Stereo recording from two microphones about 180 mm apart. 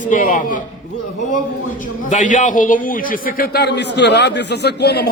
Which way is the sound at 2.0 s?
45° left (ahead or behind).